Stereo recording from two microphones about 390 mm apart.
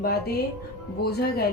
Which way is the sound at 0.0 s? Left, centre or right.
Left.